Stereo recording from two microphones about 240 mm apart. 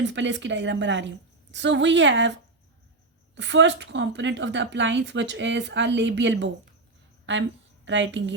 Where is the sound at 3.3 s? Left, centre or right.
Right.